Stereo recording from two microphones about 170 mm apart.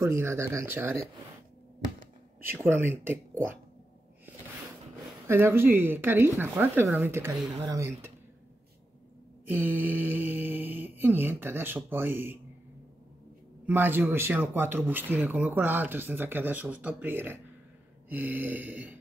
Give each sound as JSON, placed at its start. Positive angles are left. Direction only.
{"t": 0.0, "sound": "mantra", "side_deg": -15}
{"t": 2.6, "sound": "mantra", "side_deg": -15}
{"t": 5.2, "sound": "mantra", "side_deg": -15}
{"t": 7.6, "sound": "speech", "side_deg": -20}
{"t": 9.5, "sound": "mantra", "side_deg": -10}
{"t": 13.7, "sound": "mantra", "side_deg": -10}